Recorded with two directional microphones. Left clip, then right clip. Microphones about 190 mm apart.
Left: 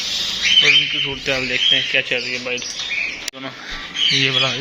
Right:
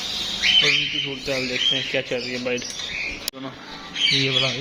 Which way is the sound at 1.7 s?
15° right (ahead or behind).